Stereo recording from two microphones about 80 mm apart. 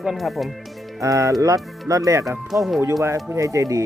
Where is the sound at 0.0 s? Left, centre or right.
Centre.